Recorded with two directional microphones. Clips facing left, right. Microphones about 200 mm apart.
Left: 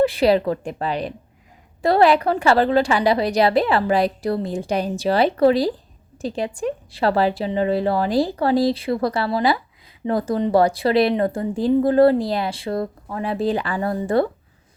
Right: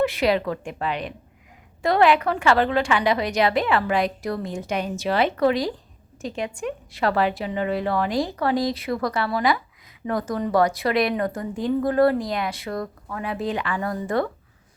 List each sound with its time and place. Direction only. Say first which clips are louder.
0.0 s a woman's voice: left 4 dB; 35° left (ahead or behind)